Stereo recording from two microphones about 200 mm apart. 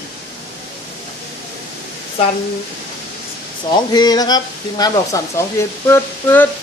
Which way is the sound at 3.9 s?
20° left (ahead or behind).